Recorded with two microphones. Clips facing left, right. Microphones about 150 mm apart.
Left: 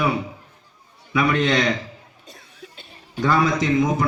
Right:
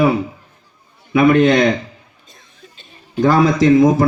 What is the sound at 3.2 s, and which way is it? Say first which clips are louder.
Speech: right 7 dB; 35° right (ahead or behind).